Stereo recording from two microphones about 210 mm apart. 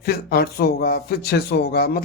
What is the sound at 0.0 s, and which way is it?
Speech, 50° left (ahead or behind).